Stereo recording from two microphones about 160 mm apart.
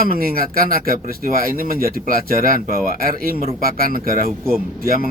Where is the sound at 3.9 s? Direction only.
65° right (ahead or behind).